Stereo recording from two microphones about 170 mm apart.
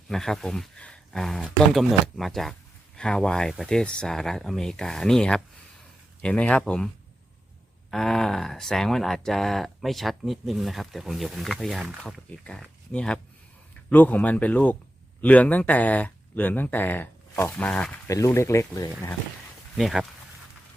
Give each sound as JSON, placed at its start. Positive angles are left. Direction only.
{"t": 0.1, "sound": "speech", "side_deg": 5}
{"t": 19.7, "sound": "speech", "side_deg": 0}